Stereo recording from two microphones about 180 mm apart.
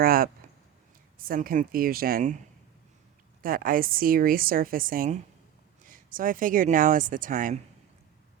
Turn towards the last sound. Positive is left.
turn(degrees=-45)  # may be behind; listen again after turning